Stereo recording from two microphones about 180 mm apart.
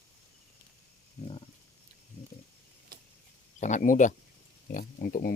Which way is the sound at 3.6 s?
45° left (ahead or behind).